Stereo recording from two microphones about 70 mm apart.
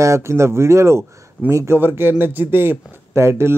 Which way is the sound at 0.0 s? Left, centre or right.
Right.